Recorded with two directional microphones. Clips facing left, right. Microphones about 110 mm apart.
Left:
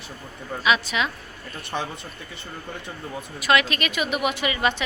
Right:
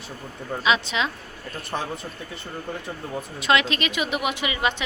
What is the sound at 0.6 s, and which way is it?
Speech, 25° right (ahead or behind).